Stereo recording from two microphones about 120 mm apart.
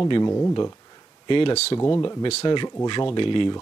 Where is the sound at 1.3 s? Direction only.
45° left (ahead or behind).